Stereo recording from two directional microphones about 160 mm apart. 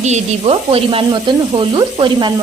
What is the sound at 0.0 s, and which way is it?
Sizzle, 45° right (ahead or behind).